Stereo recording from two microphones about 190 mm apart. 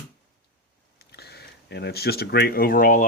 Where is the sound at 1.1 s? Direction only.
60° left (ahead or behind).